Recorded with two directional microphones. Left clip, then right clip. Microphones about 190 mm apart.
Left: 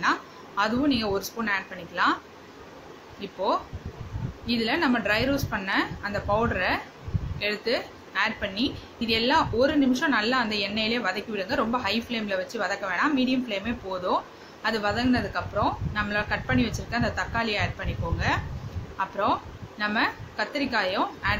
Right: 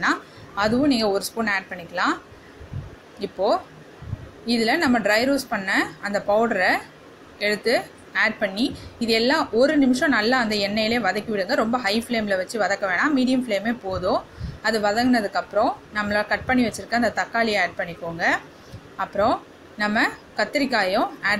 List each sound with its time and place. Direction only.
0.0 s a woman's voice: 20° right (ahead or behind)
3.2 s a woman's voice: 20° right (ahead or behind)